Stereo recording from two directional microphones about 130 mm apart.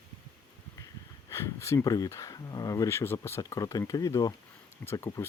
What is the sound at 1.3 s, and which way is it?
Speech, 20° left (ahead or behind).